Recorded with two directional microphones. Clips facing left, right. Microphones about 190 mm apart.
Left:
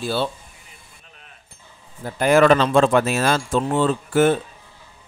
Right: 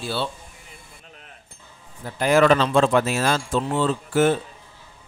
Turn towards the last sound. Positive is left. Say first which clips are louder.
# left 2 dB
turn(degrees=55)  # may be behind; listen again after turning